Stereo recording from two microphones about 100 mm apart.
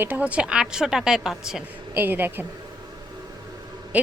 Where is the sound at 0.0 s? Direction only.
15° right (ahead or behind).